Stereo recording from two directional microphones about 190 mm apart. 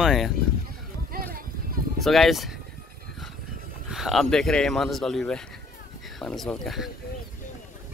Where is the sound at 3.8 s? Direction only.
Centre (ahead or behind).